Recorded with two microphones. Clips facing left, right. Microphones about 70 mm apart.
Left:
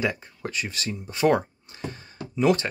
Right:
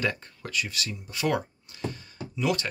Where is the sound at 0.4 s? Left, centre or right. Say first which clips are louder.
Even; left.